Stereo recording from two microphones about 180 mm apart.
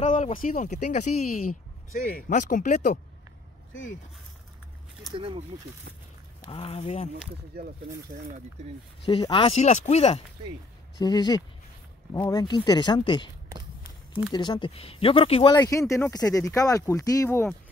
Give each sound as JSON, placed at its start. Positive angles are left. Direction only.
{"t": 0.0, "sound": "speech", "side_deg": 45}
{"t": 5.1, "sound": "speech", "side_deg": -30}
{"t": 6.4, "sound": "speech", "side_deg": 30}
{"t": 9.0, "sound": "speech", "side_deg": 30}
{"t": 11.0, "sound": "speech", "side_deg": 20}
{"t": 14.3, "sound": "speech", "side_deg": 25}